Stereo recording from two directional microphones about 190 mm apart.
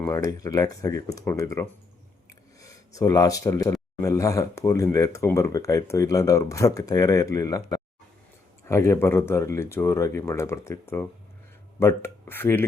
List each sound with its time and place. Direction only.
0.0 s speech: 15° left (ahead or behind)